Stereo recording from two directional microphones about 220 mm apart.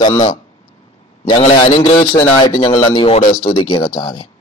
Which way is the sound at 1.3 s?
25° left (ahead or behind).